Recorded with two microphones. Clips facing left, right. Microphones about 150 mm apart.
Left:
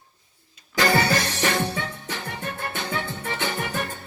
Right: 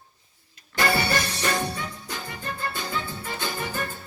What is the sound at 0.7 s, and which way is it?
Music, 90° left.